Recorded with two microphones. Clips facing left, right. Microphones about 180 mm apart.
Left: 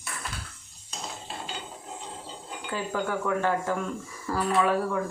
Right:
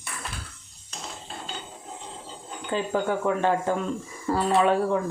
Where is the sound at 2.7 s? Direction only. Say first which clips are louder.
Right 4 dB; 20° right (ahead or behind).